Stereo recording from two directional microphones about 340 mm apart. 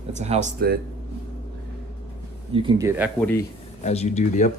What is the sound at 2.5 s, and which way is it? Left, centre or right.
Speech, centre.